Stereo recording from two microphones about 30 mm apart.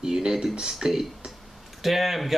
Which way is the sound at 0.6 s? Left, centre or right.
Centre.